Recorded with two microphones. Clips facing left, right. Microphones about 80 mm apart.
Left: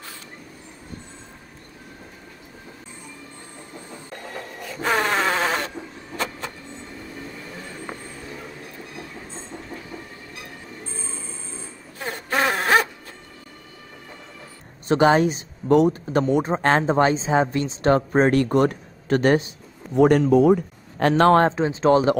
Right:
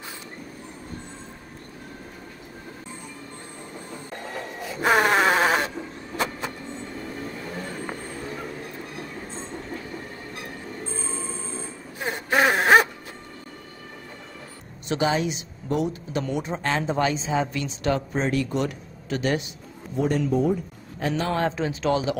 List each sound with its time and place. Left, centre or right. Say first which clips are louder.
4.3 s bleat: right 1 dB; centre
6.1 s vehicle: right 1 dB; centre
12.0 s wail: right 2 dB; centre
14.9 s a woman's voice: left 7 dB; left
18.1 s speech: left 7 dB; left
20.0 s a man's voice: left 8 dB; left
21.5 s a woman's voice: left 6 dB; left